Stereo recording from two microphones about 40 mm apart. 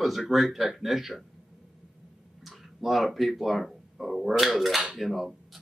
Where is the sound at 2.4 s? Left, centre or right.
Centre.